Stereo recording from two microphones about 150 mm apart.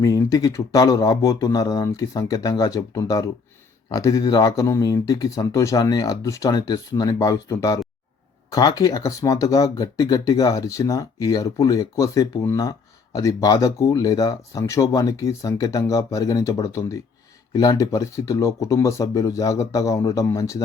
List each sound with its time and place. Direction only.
0.0 s speech: 25° left (ahead or behind)